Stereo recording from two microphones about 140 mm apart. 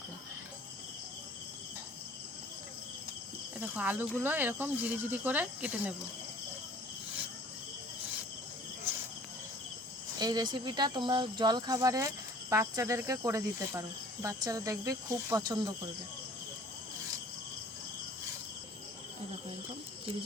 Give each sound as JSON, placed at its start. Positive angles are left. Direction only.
{"t": 3.6, "sound": "speech", "side_deg": -10}
{"t": 10.2, "sound": "speech", "side_deg": -30}